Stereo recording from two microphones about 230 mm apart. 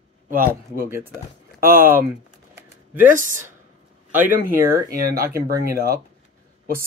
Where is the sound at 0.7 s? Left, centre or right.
Centre.